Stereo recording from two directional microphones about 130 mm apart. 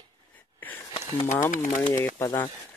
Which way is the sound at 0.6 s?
15° left (ahead or behind).